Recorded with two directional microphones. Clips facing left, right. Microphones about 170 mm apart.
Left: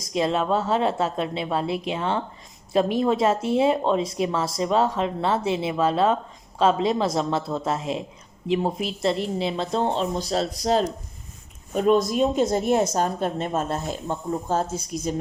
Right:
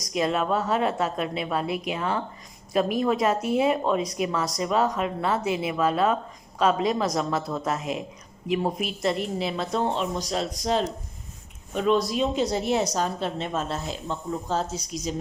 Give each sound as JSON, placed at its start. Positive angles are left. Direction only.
{"t": 0.0, "sound": "a woman's voice", "side_deg": 30}